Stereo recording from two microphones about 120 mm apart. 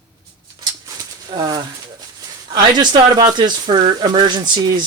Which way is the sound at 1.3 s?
40° right (ahead or behind).